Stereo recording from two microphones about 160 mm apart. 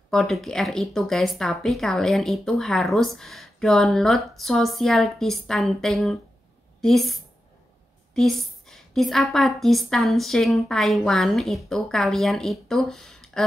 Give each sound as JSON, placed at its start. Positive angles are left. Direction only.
{"t": 0.1, "sound": "a woman's voice", "side_deg": 0}